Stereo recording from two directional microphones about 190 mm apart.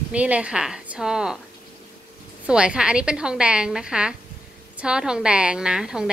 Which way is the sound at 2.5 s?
5° right (ahead or behind).